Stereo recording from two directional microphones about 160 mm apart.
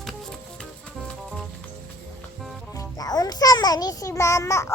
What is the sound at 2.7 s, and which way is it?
Music, 25° left (ahead or behind).